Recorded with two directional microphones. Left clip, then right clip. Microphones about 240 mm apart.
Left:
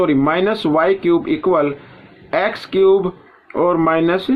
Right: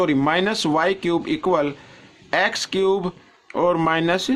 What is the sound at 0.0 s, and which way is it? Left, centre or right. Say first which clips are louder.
Speech: left 4 dB; right.